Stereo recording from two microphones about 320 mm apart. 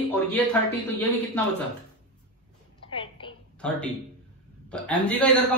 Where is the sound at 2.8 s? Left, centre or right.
Centre.